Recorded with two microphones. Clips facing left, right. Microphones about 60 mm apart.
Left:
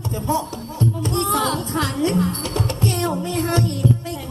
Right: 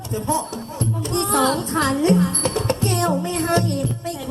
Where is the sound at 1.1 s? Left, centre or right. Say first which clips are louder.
Right 4 dB; right.